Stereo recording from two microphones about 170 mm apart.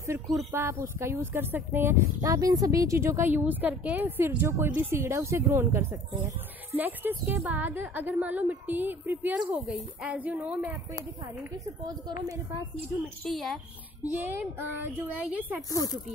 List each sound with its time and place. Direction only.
0.0 s a woman's voice: 15° right (ahead or behind)
13.2 s speech: centre (ahead or behind)
14.0 s speech: 10° right (ahead or behind)
15.7 s speech: 20° left (ahead or behind)